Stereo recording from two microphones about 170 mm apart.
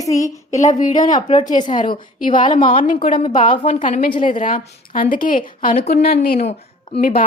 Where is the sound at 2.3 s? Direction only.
25° left (ahead or behind).